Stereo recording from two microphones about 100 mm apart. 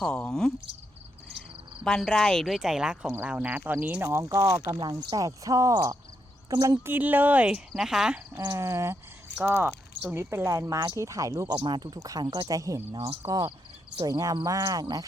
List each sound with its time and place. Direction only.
0.0 s speech: 10° left (ahead or behind)
1.4 s cricket: 5° left (ahead or behind)
3.2 s speech: 15° right (ahead or behind); by 6.7 s 40° right (ahead or behind)
6.8 s speech: 20° right (ahead or behind)
8.4 s speech: 30° right (ahead or behind)
11.6 s speech: 45° right (ahead or behind)
12.9 s speech: 50° right (ahead or behind)
14.0 s speech: 40° right (ahead or behind)